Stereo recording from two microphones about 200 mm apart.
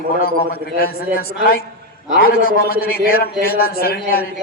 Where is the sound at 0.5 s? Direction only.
50° left (ahead or behind).